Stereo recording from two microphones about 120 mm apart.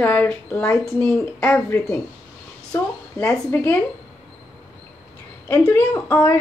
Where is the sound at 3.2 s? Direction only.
15° left (ahead or behind).